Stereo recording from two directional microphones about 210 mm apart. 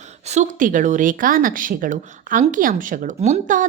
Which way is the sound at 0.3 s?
35° right (ahead or behind).